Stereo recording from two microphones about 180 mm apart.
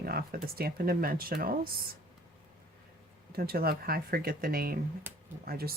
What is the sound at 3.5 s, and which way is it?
Speech, 60° right (ahead or behind).